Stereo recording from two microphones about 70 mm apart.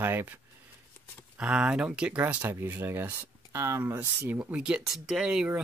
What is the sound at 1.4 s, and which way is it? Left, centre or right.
Speech, centre.